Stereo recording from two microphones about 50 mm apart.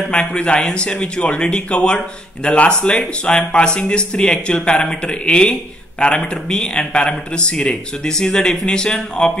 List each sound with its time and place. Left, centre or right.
0.1 s speech: left